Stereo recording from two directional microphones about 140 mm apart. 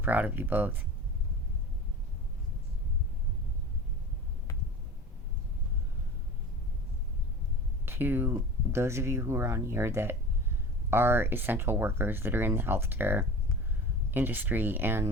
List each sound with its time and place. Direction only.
0.0 s speech: 10° right (ahead or behind)
7.9 s speech: 15° right (ahead or behind)